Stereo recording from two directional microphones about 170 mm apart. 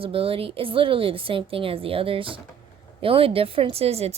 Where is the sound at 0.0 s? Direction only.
35° right (ahead or behind).